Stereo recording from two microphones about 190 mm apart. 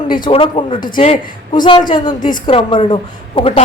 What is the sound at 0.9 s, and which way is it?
Speech, 45° left (ahead or behind).